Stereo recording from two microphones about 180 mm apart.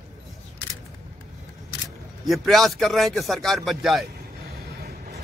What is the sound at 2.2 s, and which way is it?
A man's voice, centre (ahead or behind).